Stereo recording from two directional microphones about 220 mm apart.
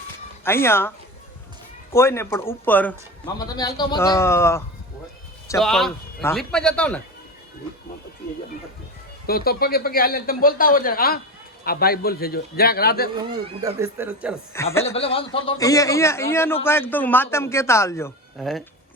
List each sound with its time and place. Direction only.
0.4 s a man's voice: 10° left (ahead or behind)
5.5 s a man's voice: centre (ahead or behind)
9.2 s speech: 45° left (ahead or behind)
13.1 s speech: 15° right (ahead or behind)
14.5 s a man's voice: 10° left (ahead or behind)
14.8 s a man's voice: 25° left (ahead or behind)
18.3 s a man's voice: centre (ahead or behind)